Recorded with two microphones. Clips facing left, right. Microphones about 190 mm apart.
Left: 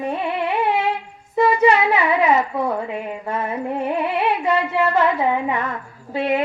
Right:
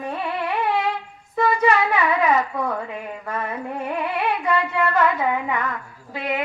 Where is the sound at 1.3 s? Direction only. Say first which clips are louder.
Left 3 dB; 25° left (ahead or behind).